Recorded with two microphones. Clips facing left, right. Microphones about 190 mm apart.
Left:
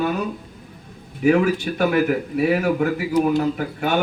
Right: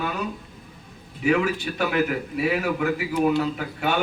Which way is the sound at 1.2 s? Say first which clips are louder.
Left 5 dB; 50° left (ahead or behind).